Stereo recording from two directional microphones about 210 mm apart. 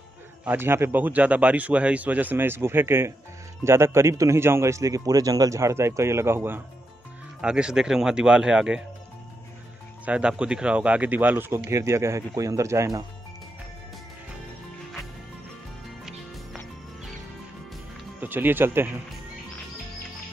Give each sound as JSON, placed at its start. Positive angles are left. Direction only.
{"t": 0.5, "sound": "a man's voice", "side_deg": -10}
{"t": 10.0, "sound": "a man's voice", "side_deg": -5}
{"t": 18.2, "sound": "a man's voice", "side_deg": -10}